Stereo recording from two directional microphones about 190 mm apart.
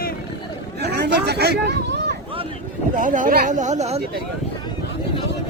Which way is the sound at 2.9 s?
45° right (ahead or behind).